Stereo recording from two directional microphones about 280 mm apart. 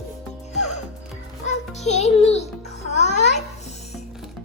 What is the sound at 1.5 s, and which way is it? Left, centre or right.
A child's voice, left.